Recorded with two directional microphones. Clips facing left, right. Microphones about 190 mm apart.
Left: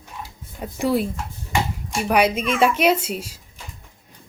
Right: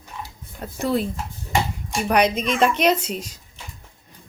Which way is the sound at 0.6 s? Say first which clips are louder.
Left 2 dB; 10° left (ahead or behind).